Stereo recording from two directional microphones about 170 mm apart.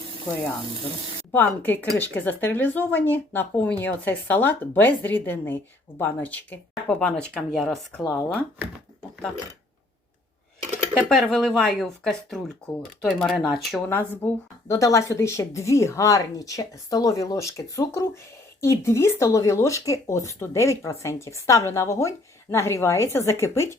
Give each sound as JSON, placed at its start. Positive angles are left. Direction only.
{"t": 1.3, "sound": "speech", "side_deg": 10}
{"t": 10.9, "sound": "speech", "side_deg": 5}